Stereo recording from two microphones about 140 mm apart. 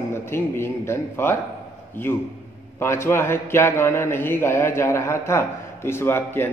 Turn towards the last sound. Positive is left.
turn(degrees=15)  # may be behind; listen again after turning